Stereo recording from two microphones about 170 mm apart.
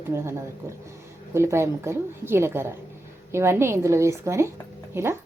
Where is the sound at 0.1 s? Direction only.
15° right (ahead or behind).